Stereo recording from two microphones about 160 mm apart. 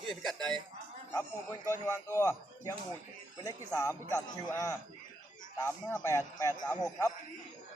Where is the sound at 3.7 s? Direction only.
20° left (ahead or behind).